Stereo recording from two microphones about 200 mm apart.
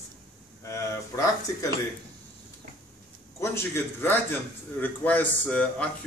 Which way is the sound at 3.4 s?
15° left (ahead or behind).